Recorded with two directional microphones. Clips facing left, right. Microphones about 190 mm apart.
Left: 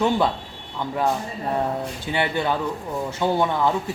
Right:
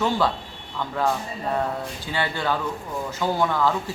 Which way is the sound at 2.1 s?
20° left (ahead or behind).